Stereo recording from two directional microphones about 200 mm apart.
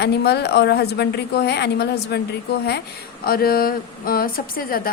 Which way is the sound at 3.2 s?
50° left (ahead or behind).